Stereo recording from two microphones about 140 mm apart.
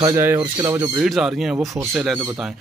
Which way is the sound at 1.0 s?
Centre (ahead or behind).